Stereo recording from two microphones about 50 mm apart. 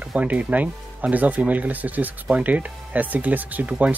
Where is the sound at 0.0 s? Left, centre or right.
Right.